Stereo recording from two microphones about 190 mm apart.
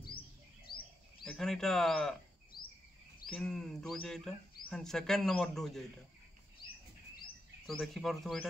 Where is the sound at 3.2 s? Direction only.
5° left (ahead or behind).